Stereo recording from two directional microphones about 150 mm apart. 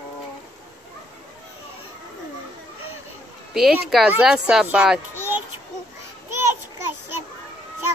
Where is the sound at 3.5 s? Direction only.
Centre (ahead or behind).